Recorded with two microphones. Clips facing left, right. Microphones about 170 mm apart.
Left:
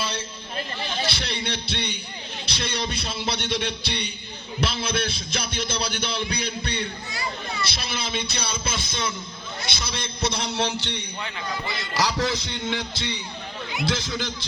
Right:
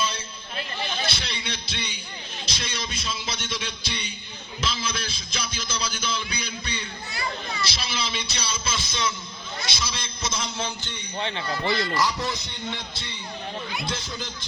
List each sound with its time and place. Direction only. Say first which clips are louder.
1.1 s music: left 4 dB; 60° left (ahead or behind)
11.2 s speech: right 4 dB; 30° right (ahead or behind)
11.9 s a man's voice: left 2 dB; 90° left